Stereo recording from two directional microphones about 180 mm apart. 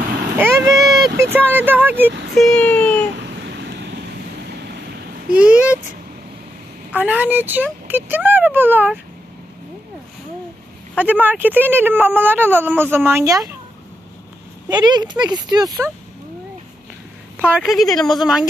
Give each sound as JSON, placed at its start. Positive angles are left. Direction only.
{"t": 0.0, "sound": "vehicle", "side_deg": -45}
{"t": 0.4, "sound": "speech", "side_deg": -15}
{"t": 0.7, "sound": "vehicle", "side_deg": 0}
{"t": 1.3, "sound": "speech", "side_deg": -10}
{"t": 2.3, "sound": "speech", "side_deg": 0}
{"t": 3.2, "sound": "vehicle", "side_deg": -70}
{"t": 5.3, "sound": "speech", "side_deg": -10}
{"t": 6.9, "sound": "speech", "side_deg": -10}
{"t": 11.0, "sound": "speech", "side_deg": -10}
{"t": 14.7, "sound": "speech", "side_deg": -25}
{"t": 17.4, "sound": "speech", "side_deg": -5}